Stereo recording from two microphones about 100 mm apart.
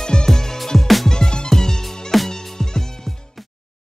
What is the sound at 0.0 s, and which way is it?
Music, 5° left (ahead or behind).